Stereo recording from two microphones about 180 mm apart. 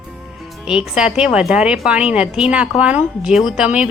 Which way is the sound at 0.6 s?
5° right (ahead or behind).